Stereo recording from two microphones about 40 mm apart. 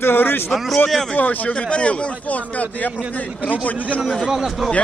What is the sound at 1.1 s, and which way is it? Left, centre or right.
Speech, left.